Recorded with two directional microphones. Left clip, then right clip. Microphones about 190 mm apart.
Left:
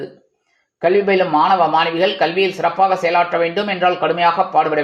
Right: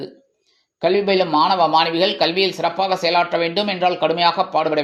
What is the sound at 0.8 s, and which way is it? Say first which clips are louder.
A man's voice: left 2 dB; 35° right (ahead or behind).